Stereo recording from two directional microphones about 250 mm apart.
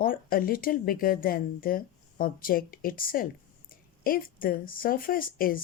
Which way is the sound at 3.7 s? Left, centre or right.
Left.